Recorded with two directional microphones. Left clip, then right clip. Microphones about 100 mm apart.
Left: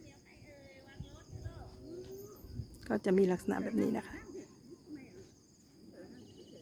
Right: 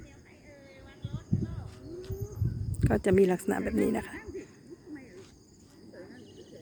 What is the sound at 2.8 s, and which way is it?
Speech, 15° right (ahead or behind).